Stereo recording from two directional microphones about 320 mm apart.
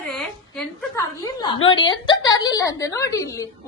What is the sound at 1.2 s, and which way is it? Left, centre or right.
A woman's voice, centre.